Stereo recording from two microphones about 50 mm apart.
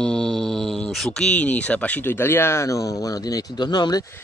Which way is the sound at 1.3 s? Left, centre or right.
Left.